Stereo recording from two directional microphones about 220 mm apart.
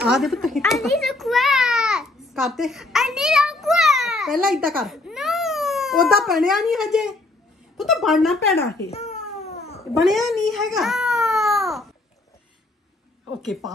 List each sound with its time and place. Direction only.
0.0 s a woman's voice: centre (ahead or behind)
0.7 s a sound: centre (ahead or behind)
4.7 s a woman's voice: centre (ahead or behind)
8.5 s a child's voice: 45° left (ahead or behind)
8.9 s cat: 30° left (ahead or behind)
10.0 s babbling: centre (ahead or behind)
13.4 s a woman's voice: centre (ahead or behind)